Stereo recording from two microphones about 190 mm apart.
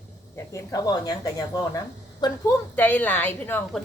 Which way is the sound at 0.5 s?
20° left (ahead or behind).